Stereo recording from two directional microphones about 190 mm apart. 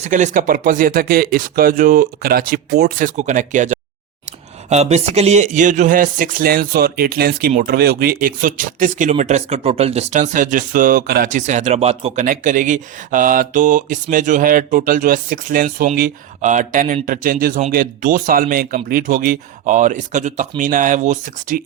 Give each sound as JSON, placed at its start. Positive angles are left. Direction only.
{"t": 0.0, "sound": "speech", "side_deg": -40}